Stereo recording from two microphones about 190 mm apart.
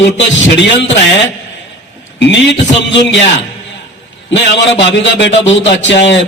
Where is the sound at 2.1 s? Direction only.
70° left (ahead or behind).